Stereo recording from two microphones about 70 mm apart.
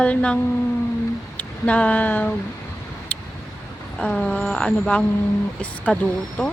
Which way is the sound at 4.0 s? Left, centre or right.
Centre.